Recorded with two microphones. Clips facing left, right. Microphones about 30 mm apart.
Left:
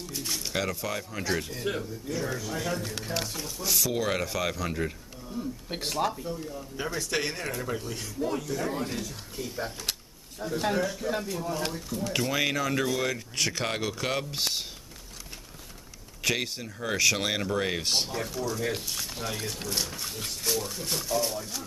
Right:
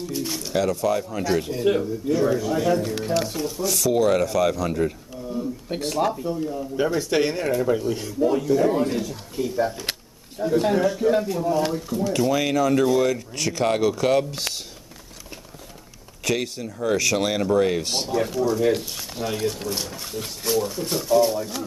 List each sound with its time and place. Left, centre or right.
0.1 s bird: centre
0.6 s speech: centre
1.4 s speech: centre
3.6 s speech: centre
6.1 s speech: centre
9.8 s a sound: right
10.8 s speech: centre
11.1 s speech: centre
12.1 s speech: centre
16.3 s speech: centre
18.4 s speech: centre